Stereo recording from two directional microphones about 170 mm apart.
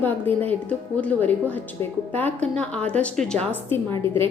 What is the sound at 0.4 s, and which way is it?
A woman's voice, 10° left (ahead or behind).